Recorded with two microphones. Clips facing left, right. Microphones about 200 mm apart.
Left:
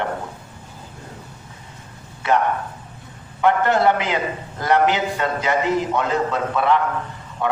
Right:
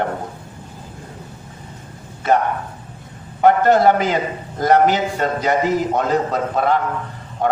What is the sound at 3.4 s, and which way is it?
A man's voice, 40° right (ahead or behind).